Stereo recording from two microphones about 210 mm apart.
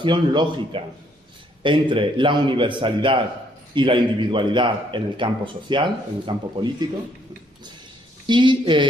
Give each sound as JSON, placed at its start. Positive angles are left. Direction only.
{"t": 0.0, "sound": "a man's voice", "side_deg": -20}
{"t": 8.3, "sound": "a man's voice", "side_deg": -20}